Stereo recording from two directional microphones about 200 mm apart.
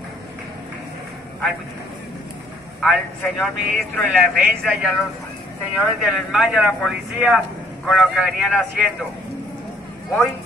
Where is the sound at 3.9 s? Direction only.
Centre (ahead or behind).